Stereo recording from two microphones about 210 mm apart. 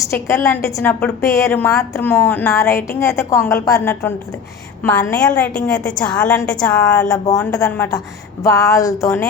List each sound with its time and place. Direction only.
0.1 s a woman's voice: 15° left (ahead or behind)
7.3 s a woman's voice: 15° left (ahead or behind)